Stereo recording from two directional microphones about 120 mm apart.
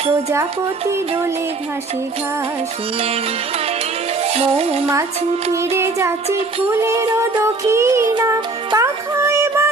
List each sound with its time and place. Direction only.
4.4 s music: 55° right (ahead or behind)
5.7 s music: 20° right (ahead or behind)